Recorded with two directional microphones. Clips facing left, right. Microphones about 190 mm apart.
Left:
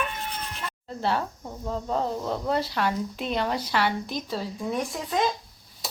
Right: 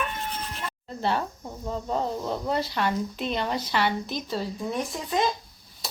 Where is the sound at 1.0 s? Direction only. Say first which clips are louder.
Even; centre (ahead or behind).